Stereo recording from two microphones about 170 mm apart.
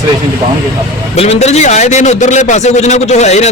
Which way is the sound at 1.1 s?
40° left (ahead or behind).